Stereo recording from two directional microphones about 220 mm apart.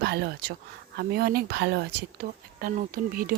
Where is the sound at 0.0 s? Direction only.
50° right (ahead or behind).